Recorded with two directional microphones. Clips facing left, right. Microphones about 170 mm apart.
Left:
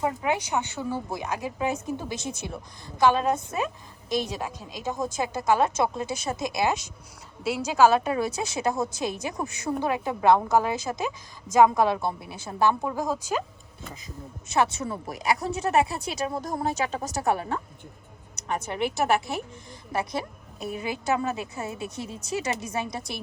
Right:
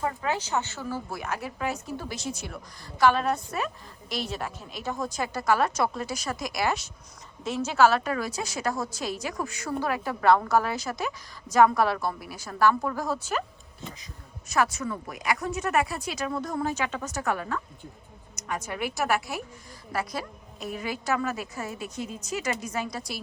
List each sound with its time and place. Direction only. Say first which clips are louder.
0.0 s a woman's voice: left 3 dB; 15° left (ahead or behind)
14.5 s speech: left 2 dB; 25° left (ahead or behind)
16.4 s speech: left 1 dB; 40° left (ahead or behind)
18.7 s a woman's voice: left 3 dB; 25° left (ahead or behind)